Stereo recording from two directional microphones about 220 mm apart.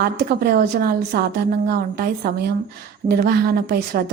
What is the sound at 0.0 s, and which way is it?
A woman's voice, 45° right (ahead or behind).